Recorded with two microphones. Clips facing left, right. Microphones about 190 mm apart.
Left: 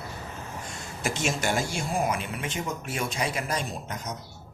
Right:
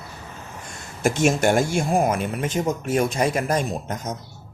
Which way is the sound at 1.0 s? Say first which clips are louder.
Right 9 dB; 50° right (ahead or behind).